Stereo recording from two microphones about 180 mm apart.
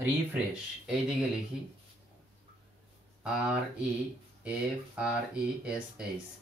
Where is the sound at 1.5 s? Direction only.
5° right (ahead or behind).